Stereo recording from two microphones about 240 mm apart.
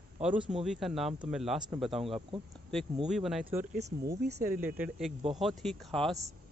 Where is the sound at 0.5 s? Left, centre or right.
Centre.